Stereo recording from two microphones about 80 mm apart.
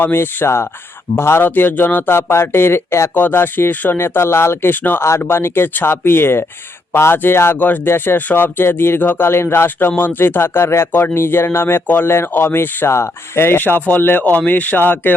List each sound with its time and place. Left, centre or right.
0.0 s speech: left